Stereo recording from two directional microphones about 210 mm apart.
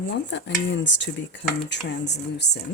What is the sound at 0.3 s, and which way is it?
Dishes, 60° left (ahead or behind).